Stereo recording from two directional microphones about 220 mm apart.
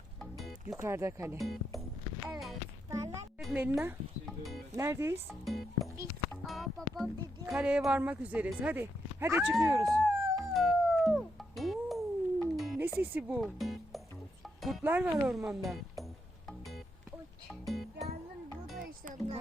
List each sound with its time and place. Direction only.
0.2 s music: centre (ahead or behind)
0.7 s speech: 10° right (ahead or behind)
1.4 s speech: centre (ahead or behind)
3.4 s speech: 5° right (ahead or behind)
4.7 s speech: 15° right (ahead or behind)
5.3 s speech: centre (ahead or behind)
9.8 s music: centre (ahead or behind)
18.8 s music: 35° right (ahead or behind)